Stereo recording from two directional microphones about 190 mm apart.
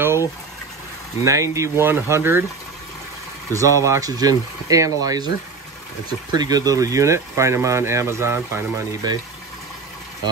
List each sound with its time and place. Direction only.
1.2 s speech: 15° right (ahead or behind)
3.5 s speech: 15° right (ahead or behind)
6.3 s speech: 20° right (ahead or behind)